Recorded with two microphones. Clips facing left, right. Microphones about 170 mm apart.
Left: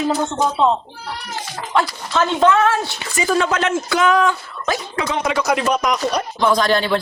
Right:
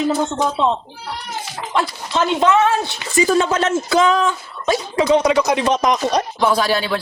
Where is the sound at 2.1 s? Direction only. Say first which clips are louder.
Even; 20° right (ahead or behind).